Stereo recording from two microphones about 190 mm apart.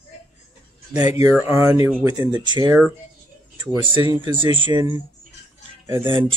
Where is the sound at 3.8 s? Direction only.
25° right (ahead or behind).